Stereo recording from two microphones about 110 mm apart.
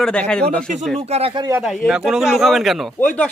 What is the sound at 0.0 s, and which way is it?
Speech, 5° left (ahead or behind).